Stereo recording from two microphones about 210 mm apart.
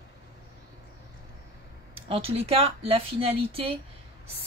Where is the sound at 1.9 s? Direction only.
25° right (ahead or behind).